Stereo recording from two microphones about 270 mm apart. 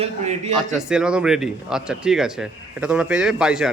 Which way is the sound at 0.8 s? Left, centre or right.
Centre.